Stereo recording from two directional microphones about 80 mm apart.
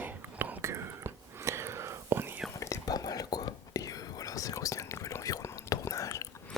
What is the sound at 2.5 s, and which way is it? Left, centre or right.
Whispering, left.